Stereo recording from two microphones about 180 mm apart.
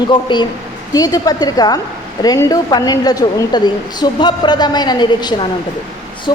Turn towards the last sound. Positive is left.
turn(degrees=25)  # may be behind; listen again after turning